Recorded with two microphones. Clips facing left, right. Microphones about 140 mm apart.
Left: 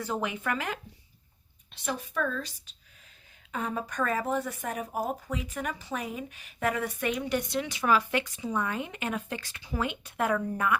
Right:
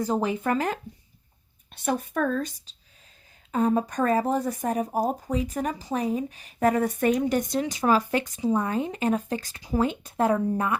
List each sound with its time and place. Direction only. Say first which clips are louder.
0.0 s speech: right 6 dB; 35° right (ahead or behind)
1.7 s speech: right 6 dB; 50° right (ahead or behind)
3.5 s speech: right 10 dB; 40° right (ahead or behind)